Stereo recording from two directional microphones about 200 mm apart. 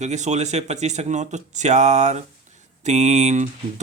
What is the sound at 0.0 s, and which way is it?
Speech, 35° right (ahead or behind).